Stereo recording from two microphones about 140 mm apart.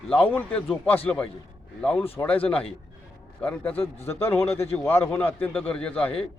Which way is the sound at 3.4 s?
10° left (ahead or behind).